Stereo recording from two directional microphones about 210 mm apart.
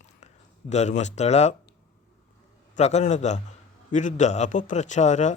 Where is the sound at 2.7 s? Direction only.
30° left (ahead or behind).